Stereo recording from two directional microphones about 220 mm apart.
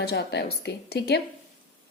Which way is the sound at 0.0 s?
50° left (ahead or behind).